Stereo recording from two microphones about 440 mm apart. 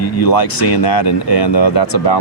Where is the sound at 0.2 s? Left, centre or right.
Left.